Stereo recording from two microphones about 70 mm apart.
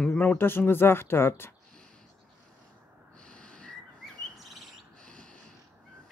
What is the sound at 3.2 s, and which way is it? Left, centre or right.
Owl, centre.